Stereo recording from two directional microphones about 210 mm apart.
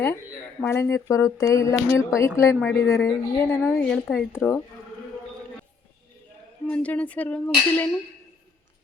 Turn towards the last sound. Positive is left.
turn(degrees=5)  # may be behind; listen again after turning